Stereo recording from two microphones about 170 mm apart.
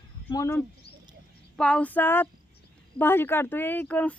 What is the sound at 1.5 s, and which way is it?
Speech, 5° left (ahead or behind).